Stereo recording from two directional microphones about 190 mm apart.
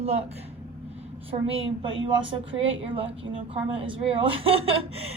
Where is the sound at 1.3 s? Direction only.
30° right (ahead or behind).